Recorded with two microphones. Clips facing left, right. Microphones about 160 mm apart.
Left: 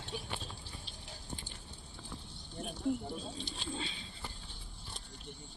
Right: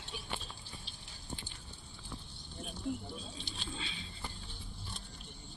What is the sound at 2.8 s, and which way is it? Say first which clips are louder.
Speech: left 4 dB; 50° left (ahead or behind).